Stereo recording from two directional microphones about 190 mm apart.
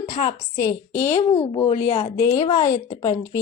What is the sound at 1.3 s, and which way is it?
Speech, 30° left (ahead or behind).